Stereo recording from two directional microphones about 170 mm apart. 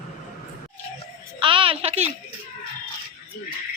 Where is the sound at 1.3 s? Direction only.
30° right (ahead or behind).